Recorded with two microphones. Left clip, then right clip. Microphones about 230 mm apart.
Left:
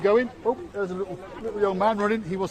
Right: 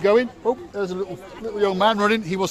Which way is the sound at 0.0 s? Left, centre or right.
Right.